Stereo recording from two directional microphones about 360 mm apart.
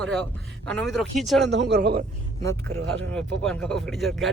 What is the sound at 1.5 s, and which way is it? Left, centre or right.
Speech, right.